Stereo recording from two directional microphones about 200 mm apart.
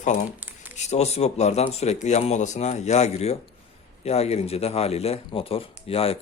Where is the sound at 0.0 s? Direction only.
40° left (ahead or behind).